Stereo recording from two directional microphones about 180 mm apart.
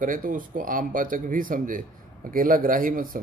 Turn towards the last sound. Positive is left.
turn(degrees=-50)  # may be behind; listen again after turning